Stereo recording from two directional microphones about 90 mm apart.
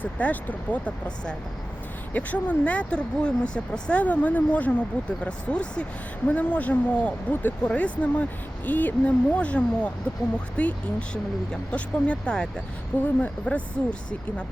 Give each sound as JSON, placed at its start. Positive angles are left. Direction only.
{"t": 0.0, "sound": "speech", "side_deg": 20}